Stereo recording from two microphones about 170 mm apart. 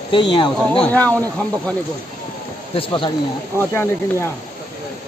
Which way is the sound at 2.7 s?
30° left (ahead or behind).